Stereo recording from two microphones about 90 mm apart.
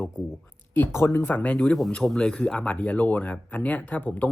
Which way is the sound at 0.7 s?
25° left (ahead or behind).